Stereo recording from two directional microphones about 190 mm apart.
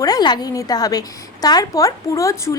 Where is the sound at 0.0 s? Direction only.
20° left (ahead or behind).